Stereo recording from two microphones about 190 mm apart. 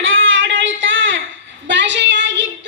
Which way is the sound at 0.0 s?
85° right.